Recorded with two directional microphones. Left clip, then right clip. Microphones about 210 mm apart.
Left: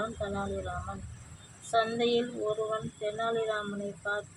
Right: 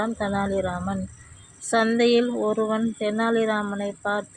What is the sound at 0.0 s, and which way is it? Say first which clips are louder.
Speech: right 8 dB; 45° right (ahead or behind).